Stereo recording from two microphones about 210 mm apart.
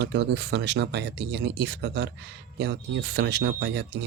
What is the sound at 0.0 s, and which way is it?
Speech, 55° right (ahead or behind).